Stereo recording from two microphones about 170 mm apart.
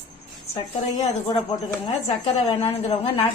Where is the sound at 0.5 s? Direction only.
35° left (ahead or behind).